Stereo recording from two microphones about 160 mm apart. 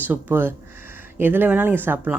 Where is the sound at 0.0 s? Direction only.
10° right (ahead or behind).